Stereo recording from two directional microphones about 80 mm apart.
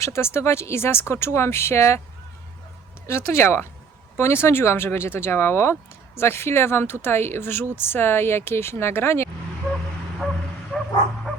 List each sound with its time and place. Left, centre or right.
0.0 s speech: left
3.1 s speech: left
10.7 s bow-wow: centre